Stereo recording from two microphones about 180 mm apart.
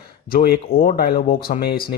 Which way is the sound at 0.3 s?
55° left (ahead or behind).